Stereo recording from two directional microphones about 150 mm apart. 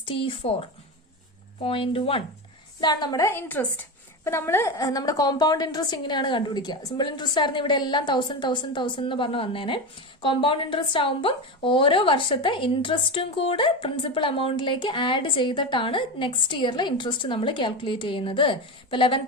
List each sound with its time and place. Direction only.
0.0 s a woman's voice: 35° left (ahead or behind)